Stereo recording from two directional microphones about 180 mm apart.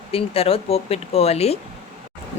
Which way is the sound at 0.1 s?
30° left (ahead or behind).